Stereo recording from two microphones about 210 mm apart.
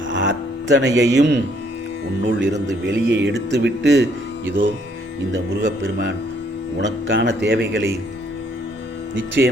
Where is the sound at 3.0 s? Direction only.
60° right (ahead or behind).